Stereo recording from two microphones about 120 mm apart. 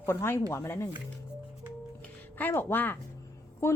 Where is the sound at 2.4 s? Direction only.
20° left (ahead or behind).